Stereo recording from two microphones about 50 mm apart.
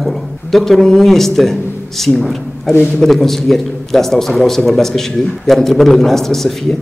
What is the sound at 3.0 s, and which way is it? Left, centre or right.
A man's voice, centre.